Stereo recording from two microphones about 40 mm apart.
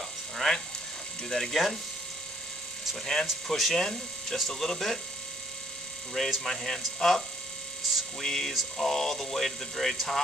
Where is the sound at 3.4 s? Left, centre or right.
Centre.